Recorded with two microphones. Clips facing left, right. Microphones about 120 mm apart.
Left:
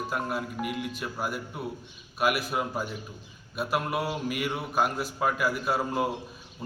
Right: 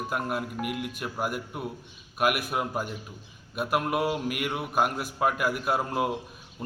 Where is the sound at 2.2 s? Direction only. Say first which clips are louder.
Right 1 dB; 55° right (ahead or behind).